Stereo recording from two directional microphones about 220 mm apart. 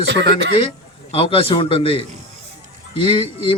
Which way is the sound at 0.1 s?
55° right (ahead or behind).